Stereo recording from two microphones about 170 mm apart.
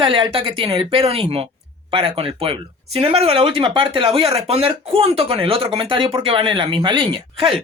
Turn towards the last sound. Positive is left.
turn(degrees=-30)  # may be behind; listen again after turning